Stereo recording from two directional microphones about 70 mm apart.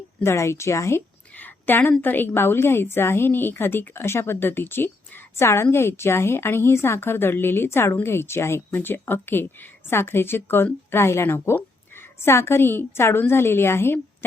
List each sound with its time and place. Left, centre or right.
0.2 s a woman's voice: left
1.4 s a woman's voice: left